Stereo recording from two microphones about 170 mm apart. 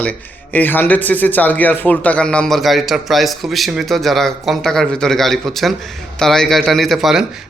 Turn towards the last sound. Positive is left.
turn(degrees=0)  # may be behind; listen again after turning